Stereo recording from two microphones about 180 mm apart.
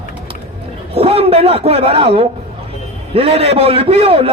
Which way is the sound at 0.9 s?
35° right (ahead or behind).